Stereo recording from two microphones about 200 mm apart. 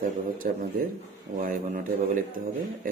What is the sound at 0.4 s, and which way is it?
Speech, 45° right (ahead or behind).